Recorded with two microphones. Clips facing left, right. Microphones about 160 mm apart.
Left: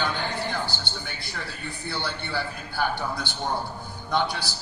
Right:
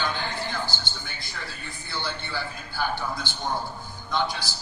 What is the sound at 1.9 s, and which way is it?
A man's voice, 65° left (ahead or behind).